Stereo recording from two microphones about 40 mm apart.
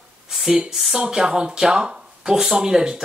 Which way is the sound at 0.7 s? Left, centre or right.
Centre.